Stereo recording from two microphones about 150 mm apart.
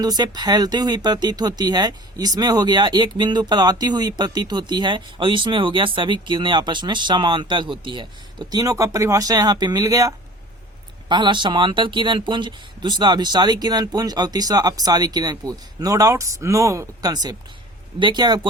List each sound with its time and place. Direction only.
0.0 s speech: 25° right (ahead or behind)